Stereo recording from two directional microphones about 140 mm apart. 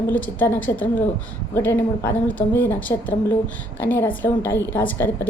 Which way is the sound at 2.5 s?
15° left (ahead or behind).